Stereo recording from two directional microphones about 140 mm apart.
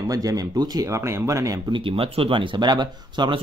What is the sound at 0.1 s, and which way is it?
Speech, 25° right (ahead or behind).